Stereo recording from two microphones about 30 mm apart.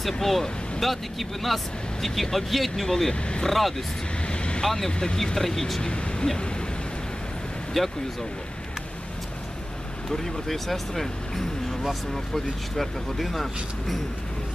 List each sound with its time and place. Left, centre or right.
0.0 s speech: centre
4.3 s vehicle: left
5.1 s speech: centre
5.8 s speech: left
7.7 s speech: centre
10.0 s speech: centre
12.7 s speech: centre